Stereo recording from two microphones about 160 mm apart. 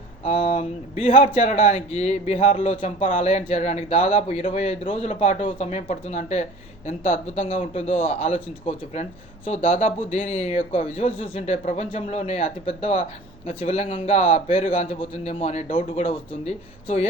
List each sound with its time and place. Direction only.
0.3 s speech: 40° left (ahead or behind)